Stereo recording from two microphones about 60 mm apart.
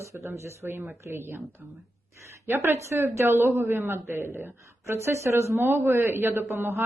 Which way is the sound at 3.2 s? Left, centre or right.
Right.